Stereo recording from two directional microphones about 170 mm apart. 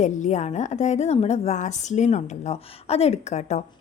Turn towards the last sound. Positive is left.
turn(degrees=40)  # may be behind; listen again after turning